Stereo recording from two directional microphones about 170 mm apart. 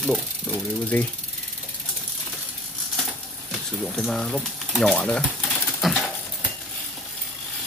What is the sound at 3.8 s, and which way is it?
Speech, 5° left (ahead or behind).